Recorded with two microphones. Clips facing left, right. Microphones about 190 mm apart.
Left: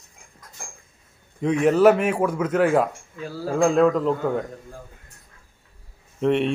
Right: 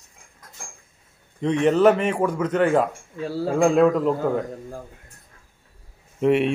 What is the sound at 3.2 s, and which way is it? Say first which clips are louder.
Speech: right 5 dB; 30° right (ahead or behind).